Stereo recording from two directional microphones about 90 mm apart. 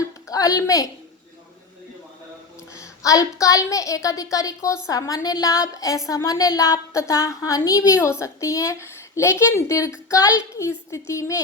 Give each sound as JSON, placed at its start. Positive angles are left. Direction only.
{"t": 0.3, "sound": "a woman's voice", "side_deg": 40}
{"t": 2.7, "sound": "a woman's voice", "side_deg": 40}